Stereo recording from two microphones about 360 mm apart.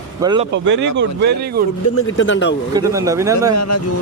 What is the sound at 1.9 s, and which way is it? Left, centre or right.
Speech, left.